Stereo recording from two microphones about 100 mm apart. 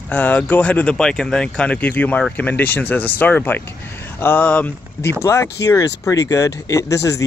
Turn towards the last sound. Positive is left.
turn(degrees=35)  # may be behind; listen again after turning